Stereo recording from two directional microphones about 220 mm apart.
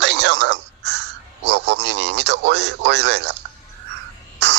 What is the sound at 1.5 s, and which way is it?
Radio, 50° right (ahead or behind).